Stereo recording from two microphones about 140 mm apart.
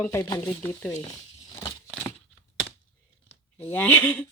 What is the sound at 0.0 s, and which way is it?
Speech, 20° left (ahead or behind).